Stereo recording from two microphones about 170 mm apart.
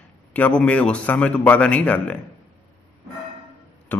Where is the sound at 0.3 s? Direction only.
5° left (ahead or behind).